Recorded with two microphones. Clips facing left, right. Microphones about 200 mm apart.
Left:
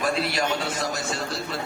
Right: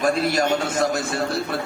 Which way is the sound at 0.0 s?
45° right (ahead or behind).